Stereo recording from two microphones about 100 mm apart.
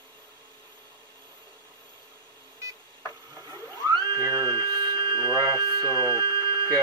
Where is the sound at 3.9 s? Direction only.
35° right (ahead or behind).